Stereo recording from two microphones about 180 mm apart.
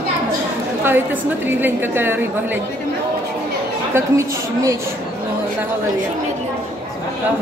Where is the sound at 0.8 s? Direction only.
10° right (ahead or behind).